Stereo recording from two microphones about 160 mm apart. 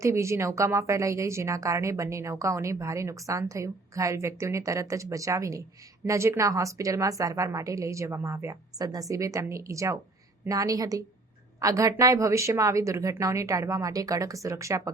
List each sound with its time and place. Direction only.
0.0 s a woman's voice: 15° right (ahead or behind)